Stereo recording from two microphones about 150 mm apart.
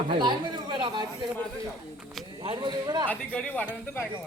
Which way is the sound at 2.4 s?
30° right (ahead or behind).